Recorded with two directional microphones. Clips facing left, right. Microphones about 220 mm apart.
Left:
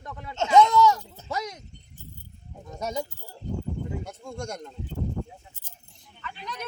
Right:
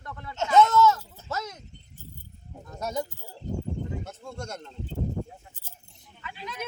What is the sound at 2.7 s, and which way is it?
Speech, 10° left (ahead or behind).